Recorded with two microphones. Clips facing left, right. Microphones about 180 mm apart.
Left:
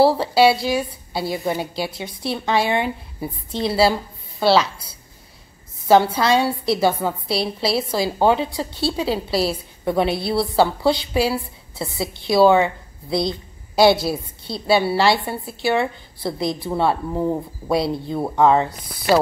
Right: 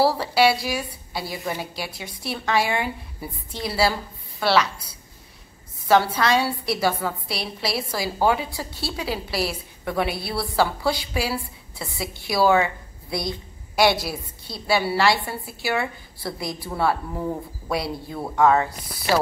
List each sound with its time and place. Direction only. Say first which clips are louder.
0.0 s a woman's voice: left 4 dB; 25° left (ahead or behind)
5.9 s a woman's voice: left 4 dB; 30° left (ahead or behind)